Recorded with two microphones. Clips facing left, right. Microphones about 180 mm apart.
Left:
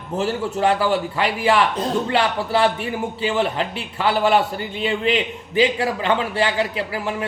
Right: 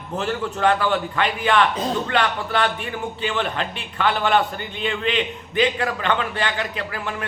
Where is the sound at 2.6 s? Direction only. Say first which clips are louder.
Left 4 dB; 25° left (ahead or behind).